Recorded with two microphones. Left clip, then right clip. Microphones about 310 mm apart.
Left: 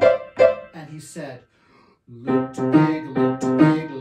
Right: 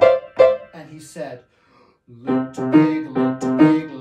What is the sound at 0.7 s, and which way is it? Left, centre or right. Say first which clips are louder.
Speech: even; centre.